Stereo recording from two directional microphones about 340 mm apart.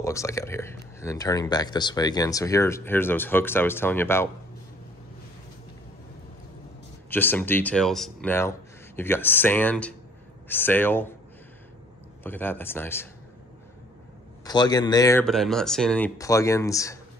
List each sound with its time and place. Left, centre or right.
0.0 s speech: centre
7.1 s speech: centre
12.2 s speech: centre
14.4 s speech: centre